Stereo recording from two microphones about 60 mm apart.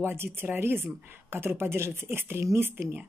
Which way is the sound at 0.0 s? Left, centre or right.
Right.